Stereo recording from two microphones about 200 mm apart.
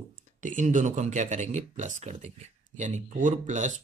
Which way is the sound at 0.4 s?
40° right (ahead or behind).